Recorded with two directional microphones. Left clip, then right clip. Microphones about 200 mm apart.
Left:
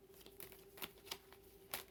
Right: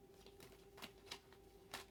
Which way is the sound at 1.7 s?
60° left (ahead or behind).